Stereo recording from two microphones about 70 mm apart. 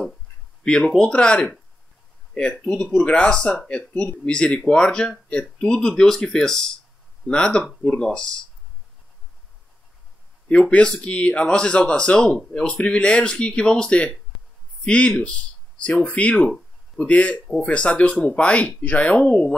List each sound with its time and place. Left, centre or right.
0.7 s speech: centre
10.5 s a man's voice: centre